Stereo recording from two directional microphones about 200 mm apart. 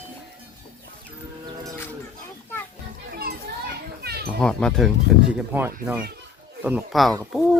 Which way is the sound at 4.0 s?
50° right (ahead or behind).